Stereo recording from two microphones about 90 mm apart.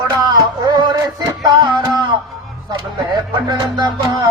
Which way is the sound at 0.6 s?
55° right (ahead or behind).